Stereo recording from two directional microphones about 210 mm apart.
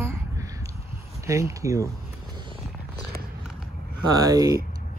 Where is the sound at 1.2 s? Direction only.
15° right (ahead or behind).